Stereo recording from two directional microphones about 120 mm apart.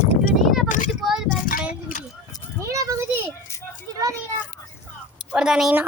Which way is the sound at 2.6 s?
25° right (ahead or behind).